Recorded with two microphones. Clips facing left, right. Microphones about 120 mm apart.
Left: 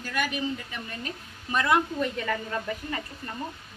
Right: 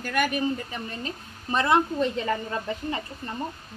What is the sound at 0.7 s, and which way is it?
A woman's voice, 35° right (ahead or behind).